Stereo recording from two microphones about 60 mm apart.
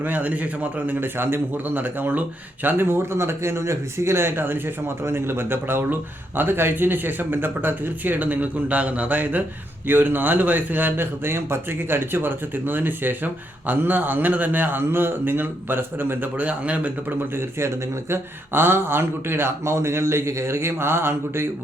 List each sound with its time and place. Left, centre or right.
0.0 s a man's voice: right
17.3 s speech: right